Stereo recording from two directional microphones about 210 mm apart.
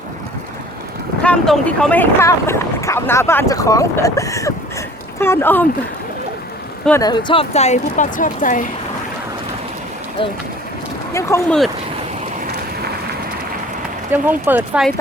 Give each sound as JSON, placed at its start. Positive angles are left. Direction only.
{"t": 1.2, "sound": "speech", "side_deg": 5}
{"t": 7.0, "sound": "speech", "side_deg": 20}
{"t": 11.1, "sound": "speech", "side_deg": 15}
{"t": 14.1, "sound": "speech", "side_deg": -10}